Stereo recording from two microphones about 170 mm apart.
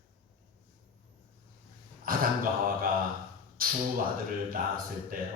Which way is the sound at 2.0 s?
55° right (ahead or behind).